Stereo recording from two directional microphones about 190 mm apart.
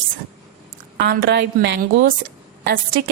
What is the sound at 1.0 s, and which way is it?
A woman's voice, 60° right (ahead or behind).